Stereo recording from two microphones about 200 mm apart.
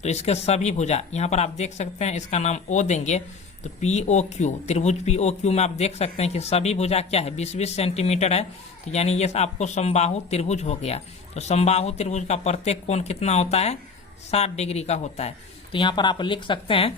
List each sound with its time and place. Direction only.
0.0 s speech: 35° left (ahead or behind)
15.7 s speech: 25° left (ahead or behind)